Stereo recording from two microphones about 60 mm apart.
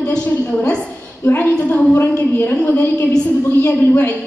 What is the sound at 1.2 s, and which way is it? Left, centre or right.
A woman's voice, left.